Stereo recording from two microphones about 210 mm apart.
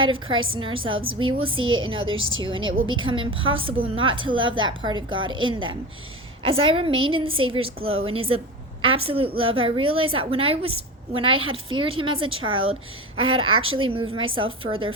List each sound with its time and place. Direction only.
0.0 s a woman's voice: 25° right (ahead or behind)